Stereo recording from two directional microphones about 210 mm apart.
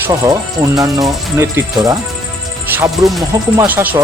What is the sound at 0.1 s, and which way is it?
Speech, 15° right (ahead or behind).